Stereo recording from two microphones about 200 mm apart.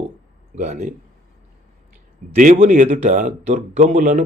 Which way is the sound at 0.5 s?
35° right (ahead or behind).